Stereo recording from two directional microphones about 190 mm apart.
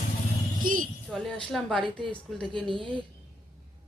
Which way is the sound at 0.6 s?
45° right (ahead or behind).